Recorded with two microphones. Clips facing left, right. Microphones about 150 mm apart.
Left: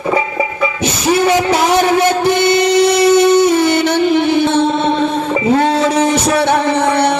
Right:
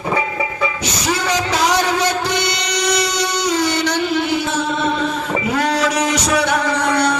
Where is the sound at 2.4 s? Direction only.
50° left (ahead or behind).